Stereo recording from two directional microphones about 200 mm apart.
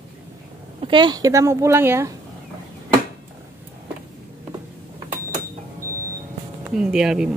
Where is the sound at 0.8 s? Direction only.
25° right (ahead or behind).